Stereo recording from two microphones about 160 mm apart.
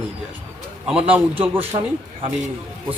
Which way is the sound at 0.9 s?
35° right (ahead or behind).